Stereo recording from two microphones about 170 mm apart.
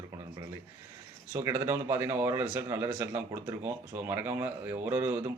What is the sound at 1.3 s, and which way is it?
Speech, 15° right (ahead or behind).